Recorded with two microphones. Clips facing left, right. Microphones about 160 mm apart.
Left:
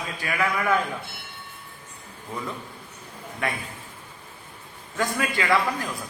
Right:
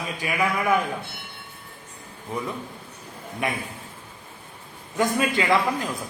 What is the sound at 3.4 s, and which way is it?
Speech, 15° right (ahead or behind).